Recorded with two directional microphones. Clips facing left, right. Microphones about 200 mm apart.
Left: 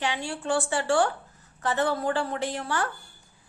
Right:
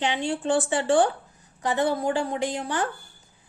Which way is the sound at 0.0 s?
20° right (ahead or behind).